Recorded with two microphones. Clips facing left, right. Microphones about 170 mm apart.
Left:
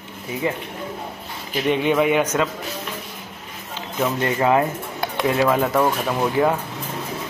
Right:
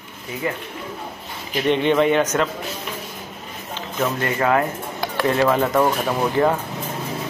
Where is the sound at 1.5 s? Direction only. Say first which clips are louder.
Right 1 dB; 5° left (ahead or behind).